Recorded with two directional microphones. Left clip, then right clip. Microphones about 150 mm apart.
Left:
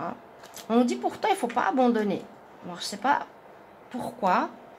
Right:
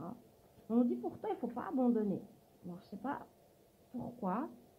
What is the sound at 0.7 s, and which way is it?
Speech, 10° left (ahead or behind).